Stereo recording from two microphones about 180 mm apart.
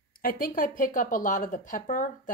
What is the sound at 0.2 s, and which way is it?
Speech, 55° left (ahead or behind).